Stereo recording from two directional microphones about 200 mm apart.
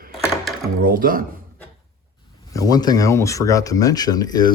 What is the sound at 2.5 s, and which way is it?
Speech, 15° left (ahead or behind).